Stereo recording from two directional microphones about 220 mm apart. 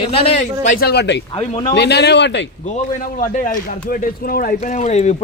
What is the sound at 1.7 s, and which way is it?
Speech, 50° left (ahead or behind).